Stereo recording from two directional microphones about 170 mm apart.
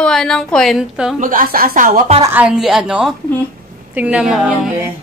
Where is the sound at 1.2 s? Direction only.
55° right (ahead or behind).